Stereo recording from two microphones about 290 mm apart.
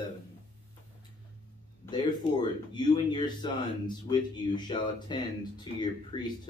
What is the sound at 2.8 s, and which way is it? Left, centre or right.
Speech, centre.